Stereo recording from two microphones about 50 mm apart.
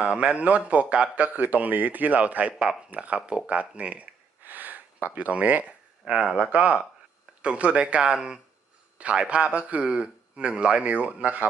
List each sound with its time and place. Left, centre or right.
0.0 s a man's voice: right
2.6 s a man's voice: centre
4.4 s a sound: right
6.3 s a man's voice: right